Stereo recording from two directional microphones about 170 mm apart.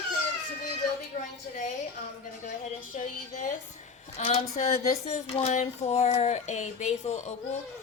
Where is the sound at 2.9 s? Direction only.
45° left (ahead or behind).